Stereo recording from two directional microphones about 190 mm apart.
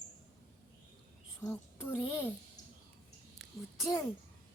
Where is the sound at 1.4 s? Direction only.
10° left (ahead or behind).